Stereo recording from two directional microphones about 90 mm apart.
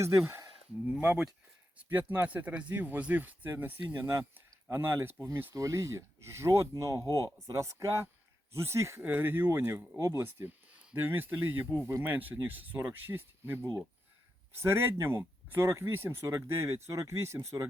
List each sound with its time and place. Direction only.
0.9 s speech: 15° right (ahead or behind)
5.5 s speech: 35° right (ahead or behind)
9.0 s speech: 20° right (ahead or behind)